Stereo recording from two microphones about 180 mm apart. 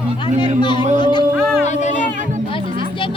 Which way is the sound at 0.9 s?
25° left (ahead or behind).